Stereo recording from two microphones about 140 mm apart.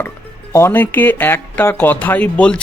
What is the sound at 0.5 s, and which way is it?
Speech, 15° left (ahead or behind).